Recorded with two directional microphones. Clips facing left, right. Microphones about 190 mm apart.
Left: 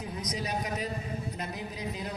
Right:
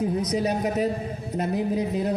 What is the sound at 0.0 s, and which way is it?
Speech, 55° right (ahead or behind).